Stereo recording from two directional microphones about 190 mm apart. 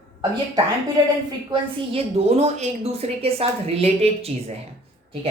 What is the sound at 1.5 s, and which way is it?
A woman's voice, 30° right (ahead or behind).